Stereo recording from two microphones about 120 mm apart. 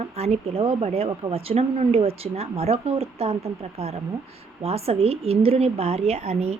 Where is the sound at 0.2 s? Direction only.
60° right (ahead or behind).